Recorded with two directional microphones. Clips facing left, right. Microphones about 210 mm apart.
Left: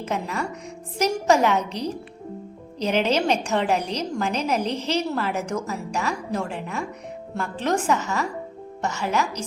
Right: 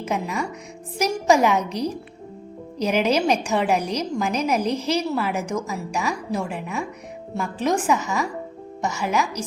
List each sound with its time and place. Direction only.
0.0 s a woman's voice: 10° right (ahead or behind)